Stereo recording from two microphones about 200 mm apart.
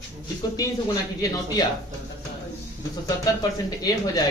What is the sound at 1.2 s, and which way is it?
Speech, 20° left (ahead or behind).